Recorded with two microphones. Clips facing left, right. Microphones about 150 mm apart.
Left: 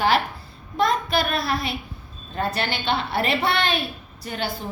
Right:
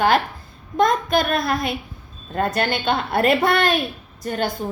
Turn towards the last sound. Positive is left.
turn(degrees=-45)  # may be behind; listen again after turning